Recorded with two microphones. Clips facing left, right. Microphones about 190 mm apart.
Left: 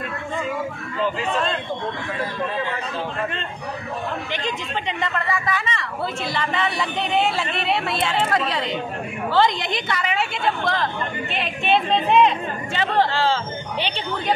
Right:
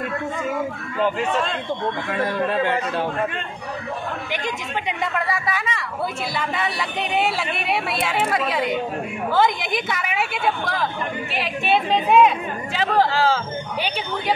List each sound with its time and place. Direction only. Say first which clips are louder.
2.4 s a man's voice: right 5 dB; 65° right (ahead or behind)
4.8 s speech: right 1 dB; 5° right (ahead or behind)